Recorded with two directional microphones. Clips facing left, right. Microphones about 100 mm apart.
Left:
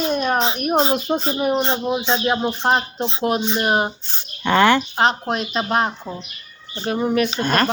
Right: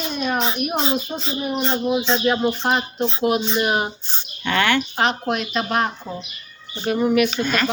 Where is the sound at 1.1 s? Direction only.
55° left (ahead or behind).